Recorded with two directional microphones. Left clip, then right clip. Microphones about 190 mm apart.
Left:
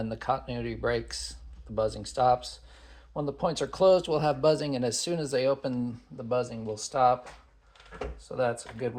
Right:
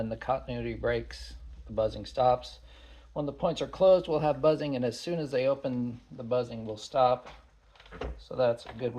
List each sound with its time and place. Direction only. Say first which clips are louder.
0.0 s speech: left 1 dB; 30° left (ahead or behind)
8.3 s speech: right 2 dB; 30° left (ahead or behind)